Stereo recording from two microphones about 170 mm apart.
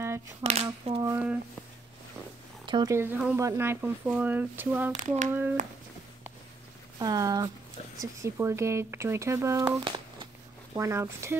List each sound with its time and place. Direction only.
0.4 s speech: 40° right (ahead or behind)
1.0 s speech: 10° right (ahead or behind)
2.6 s speech: 25° right (ahead or behind)
4.9 s a sound: 45° right (ahead or behind)
7.0 s speech: 20° right (ahead or behind)
9.8 s a sound: 25° right (ahead or behind)
10.7 s speech: 15° right (ahead or behind)